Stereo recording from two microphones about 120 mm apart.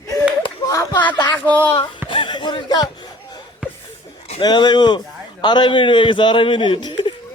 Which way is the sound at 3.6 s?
10° right (ahead or behind).